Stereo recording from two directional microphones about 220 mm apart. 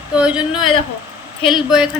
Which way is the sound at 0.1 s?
5° right (ahead or behind).